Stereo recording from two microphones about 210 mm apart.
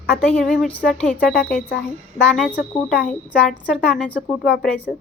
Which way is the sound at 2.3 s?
5° left (ahead or behind).